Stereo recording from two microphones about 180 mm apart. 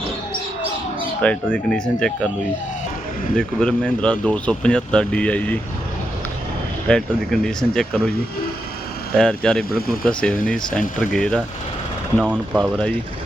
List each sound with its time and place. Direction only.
1.2 s speech: 5° left (ahead or behind)
3.3 s speech: 5° left (ahead or behind)
6.8 s speech: 5° left (ahead or behind)
9.1 s speech: 5° left (ahead or behind)
9.6 s speech: 55° left (ahead or behind)
10.1 s speech: 5° left (ahead or behind)